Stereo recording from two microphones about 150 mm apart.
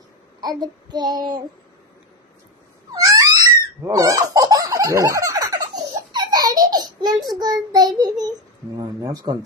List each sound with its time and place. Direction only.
0.4 s child singing: 25° right (ahead or behind)
2.9 s a sound: 20° right (ahead or behind)
6.3 s laughter: 25° right (ahead or behind)
6.7 s child singing: 25° right (ahead or behind)